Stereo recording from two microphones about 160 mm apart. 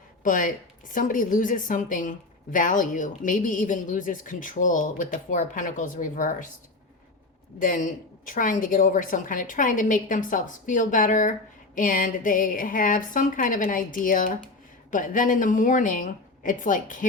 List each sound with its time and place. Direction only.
0.2 s a woman's voice: 55° left (ahead or behind)
7.6 s a woman's voice: 55° left (ahead or behind)